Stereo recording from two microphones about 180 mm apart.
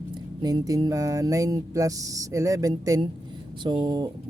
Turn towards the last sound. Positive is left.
turn(degrees=-20)  # may be behind; listen again after turning